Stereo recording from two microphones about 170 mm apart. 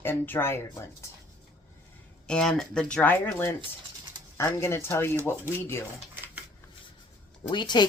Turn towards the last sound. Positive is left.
turn(degrees=25)  # may be behind; listen again after turning